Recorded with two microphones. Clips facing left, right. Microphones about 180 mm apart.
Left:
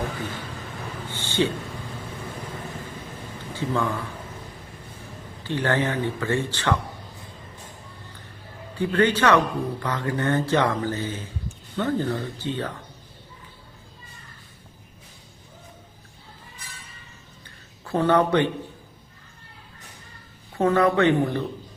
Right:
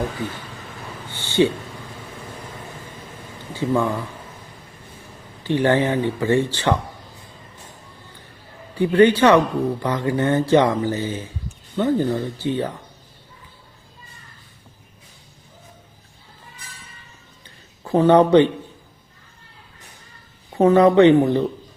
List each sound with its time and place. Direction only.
1.2 s a sound: 15° right (ahead or behind)
3.6 s speech: 15° right (ahead or behind)
5.4 s speech: 15° right (ahead or behind)
8.8 s speech: 15° right (ahead or behind)
17.8 s speech: 15° right (ahead or behind)
20.6 s speech: 20° right (ahead or behind)